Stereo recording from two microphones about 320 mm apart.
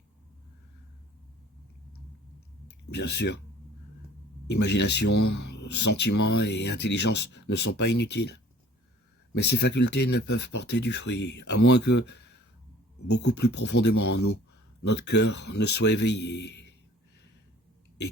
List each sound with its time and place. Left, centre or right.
2.6 s speech: left
4.4 s speech: left
5.2 s speech: left
5.5 s speech: left
13.9 s speech: left
14.8 s speech: left